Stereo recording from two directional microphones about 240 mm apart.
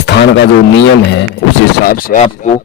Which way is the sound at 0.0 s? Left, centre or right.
Left.